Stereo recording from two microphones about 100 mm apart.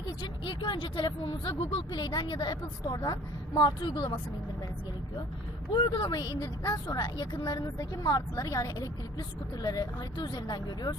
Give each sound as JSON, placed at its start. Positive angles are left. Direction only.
{"t": 0.0, "sound": "speech", "side_deg": 50}
{"t": 5.7, "sound": "a woman's voice", "side_deg": 50}